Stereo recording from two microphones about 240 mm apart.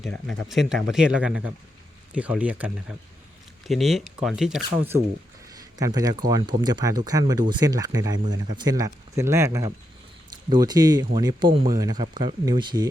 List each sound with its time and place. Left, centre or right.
0.0 s speech: centre